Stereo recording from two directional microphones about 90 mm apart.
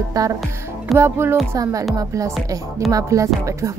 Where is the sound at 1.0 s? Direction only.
25° right (ahead or behind).